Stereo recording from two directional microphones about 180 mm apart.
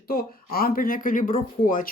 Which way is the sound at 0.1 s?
55° left (ahead or behind).